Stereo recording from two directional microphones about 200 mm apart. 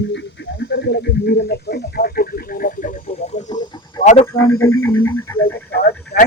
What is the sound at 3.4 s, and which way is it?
Frog, 35° left (ahead or behind).